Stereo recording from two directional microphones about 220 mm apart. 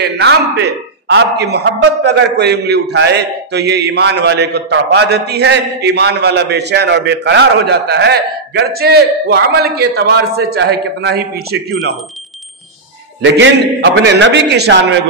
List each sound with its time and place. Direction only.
0.2 s a man's voice: 50° right (ahead or behind)
13.2 s a man's voice: 55° right (ahead or behind)